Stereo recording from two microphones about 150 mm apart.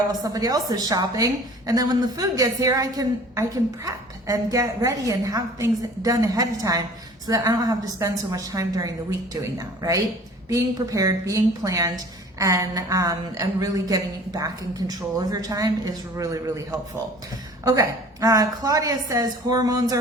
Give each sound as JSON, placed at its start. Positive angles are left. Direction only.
{"t": 0.1, "sound": "a woman's voice", "side_deg": -25}